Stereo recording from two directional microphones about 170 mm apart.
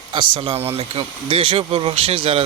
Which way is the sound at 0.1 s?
30° right (ahead or behind).